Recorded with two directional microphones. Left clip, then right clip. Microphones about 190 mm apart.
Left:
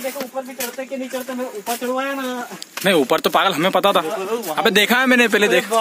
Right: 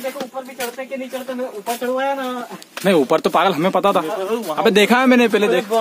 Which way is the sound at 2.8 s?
10° right (ahead or behind).